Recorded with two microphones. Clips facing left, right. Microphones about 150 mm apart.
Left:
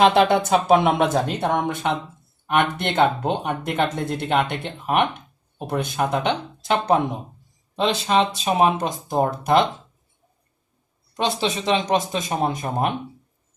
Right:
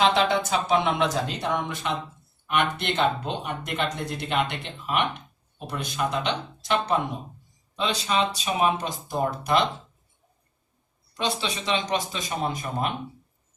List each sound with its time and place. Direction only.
0.0 s speech: 55° left (ahead or behind)
7.8 s speech: 40° left (ahead or behind)
11.1 s speech: 45° left (ahead or behind)